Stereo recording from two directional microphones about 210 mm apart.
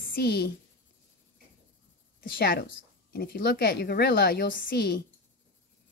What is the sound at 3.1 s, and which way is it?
Speech, 45° left (ahead or behind).